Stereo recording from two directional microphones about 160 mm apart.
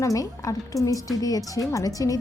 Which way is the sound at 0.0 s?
20° left (ahead or behind).